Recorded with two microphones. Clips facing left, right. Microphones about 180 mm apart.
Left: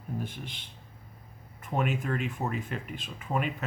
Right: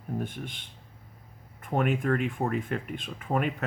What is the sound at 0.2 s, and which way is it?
Speech, 50° right (ahead or behind).